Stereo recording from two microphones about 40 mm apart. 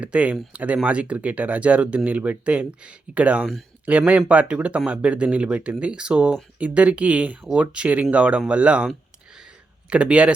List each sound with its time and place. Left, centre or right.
0.0 s speech: right
9.9 s speech: right